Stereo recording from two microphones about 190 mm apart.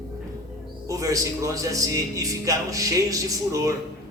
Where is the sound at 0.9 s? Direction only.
15° right (ahead or behind).